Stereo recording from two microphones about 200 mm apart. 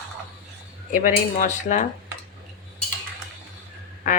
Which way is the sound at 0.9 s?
40° left (ahead or behind).